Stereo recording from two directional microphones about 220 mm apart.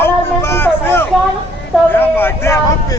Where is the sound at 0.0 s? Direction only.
10° left (ahead or behind).